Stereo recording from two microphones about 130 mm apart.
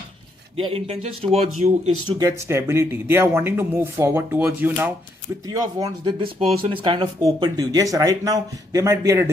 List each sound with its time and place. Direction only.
0.6 s speech: 45° right (ahead or behind)
2.4 s speech: 20° right (ahead or behind)
5.5 s speech: 30° right (ahead or behind)